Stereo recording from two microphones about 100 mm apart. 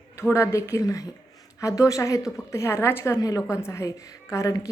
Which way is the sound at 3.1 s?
35° left (ahead or behind).